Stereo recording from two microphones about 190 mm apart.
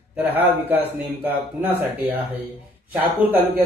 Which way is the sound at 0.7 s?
10° right (ahead or behind).